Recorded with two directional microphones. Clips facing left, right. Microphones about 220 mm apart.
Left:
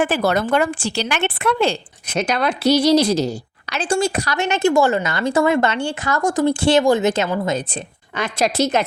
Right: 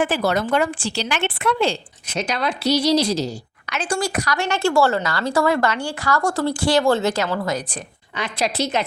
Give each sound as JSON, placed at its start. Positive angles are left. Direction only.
{"t": 0.0, "sound": "a woman's voice", "side_deg": 55}
{"t": 3.7, "sound": "a woman's voice", "side_deg": 30}
{"t": 8.1, "sound": "a woman's voice", "side_deg": 45}